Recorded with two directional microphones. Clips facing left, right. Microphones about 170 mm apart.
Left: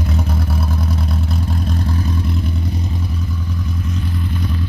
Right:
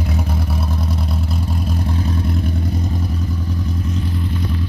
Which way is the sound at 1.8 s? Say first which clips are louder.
Even; 20° right (ahead or behind).